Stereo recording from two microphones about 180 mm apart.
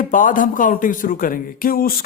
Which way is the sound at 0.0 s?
50° left (ahead or behind).